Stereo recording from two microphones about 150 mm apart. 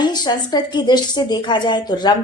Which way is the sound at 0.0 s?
30° left (ahead or behind).